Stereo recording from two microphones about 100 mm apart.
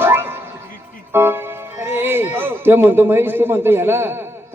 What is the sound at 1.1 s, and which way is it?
Speech, 25° right (ahead or behind).